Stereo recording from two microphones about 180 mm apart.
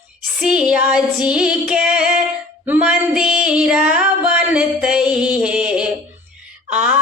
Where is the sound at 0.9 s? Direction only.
5° right (ahead or behind).